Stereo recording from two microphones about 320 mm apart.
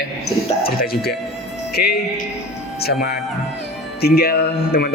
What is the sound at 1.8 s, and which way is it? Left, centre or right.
Speech, left.